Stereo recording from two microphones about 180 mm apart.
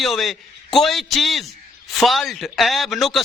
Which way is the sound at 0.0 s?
Centre (ahead or behind).